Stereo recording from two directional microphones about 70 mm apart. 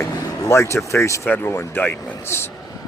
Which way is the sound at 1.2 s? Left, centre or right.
Left.